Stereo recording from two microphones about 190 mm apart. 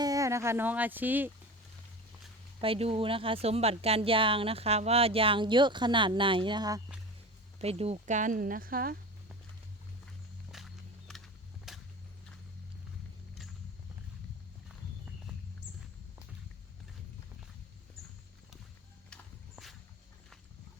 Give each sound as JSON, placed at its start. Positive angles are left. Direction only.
{"t": 0.0, "sound": "speech", "side_deg": -20}
{"t": 2.6, "sound": "speech", "side_deg": -30}
{"t": 7.6, "sound": "speech", "side_deg": -30}
{"t": 10.5, "sound": "a sound", "side_deg": 0}
{"t": 11.7, "sound": "whip", "side_deg": 0}
{"t": 19.1, "sound": "horse", "side_deg": 0}